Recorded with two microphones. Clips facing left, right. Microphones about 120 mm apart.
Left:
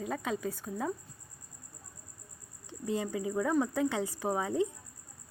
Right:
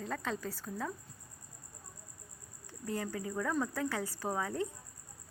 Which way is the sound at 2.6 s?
20° left (ahead or behind).